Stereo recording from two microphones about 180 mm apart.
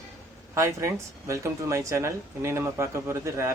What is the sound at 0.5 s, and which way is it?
Speech, 15° right (ahead or behind).